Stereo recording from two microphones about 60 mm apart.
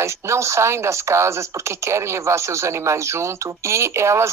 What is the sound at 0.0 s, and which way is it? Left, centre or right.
Speech, right.